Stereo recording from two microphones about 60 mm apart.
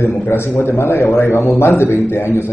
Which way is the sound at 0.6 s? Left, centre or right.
Left.